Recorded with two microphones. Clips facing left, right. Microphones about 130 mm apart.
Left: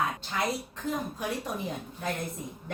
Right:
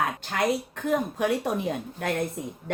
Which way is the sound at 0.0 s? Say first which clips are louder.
Right 4 dB; 65° right (ahead or behind).